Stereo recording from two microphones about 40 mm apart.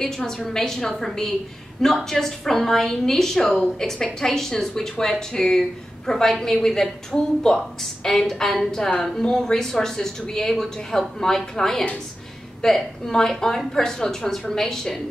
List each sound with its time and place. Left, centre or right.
0.0 s a woman's voice: centre